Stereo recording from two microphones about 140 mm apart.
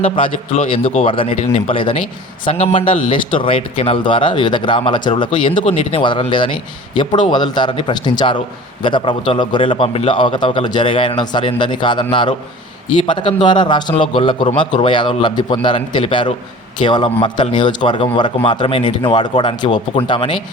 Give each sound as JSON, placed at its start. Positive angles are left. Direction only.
{"t": 0.0, "sound": "a man's voice", "side_deg": 45}